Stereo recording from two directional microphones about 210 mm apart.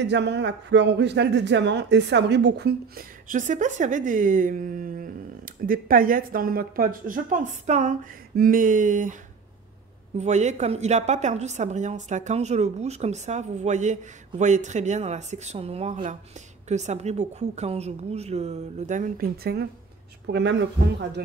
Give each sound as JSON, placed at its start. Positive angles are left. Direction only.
{"t": 0.0, "sound": "speech", "side_deg": -55}
{"t": 10.1, "sound": "a woman's voice", "side_deg": -35}